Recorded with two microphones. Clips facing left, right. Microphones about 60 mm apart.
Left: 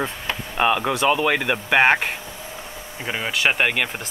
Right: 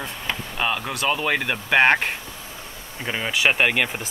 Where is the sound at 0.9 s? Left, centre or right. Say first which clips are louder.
Left 4 dB; left.